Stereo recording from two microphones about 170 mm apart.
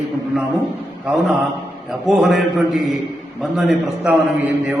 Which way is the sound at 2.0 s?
Centre (ahead or behind).